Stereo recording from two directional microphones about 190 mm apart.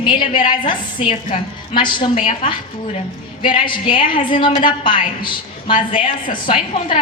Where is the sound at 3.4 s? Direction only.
25° left (ahead or behind).